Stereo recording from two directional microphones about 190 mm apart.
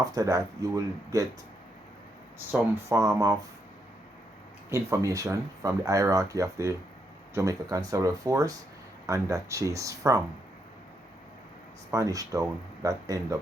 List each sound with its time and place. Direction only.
0.0 s speech: 20° right (ahead or behind)
2.5 s speech: 15° right (ahead or behind)
4.7 s speech: 15° right (ahead or behind)
11.9 s speech: 15° right (ahead or behind)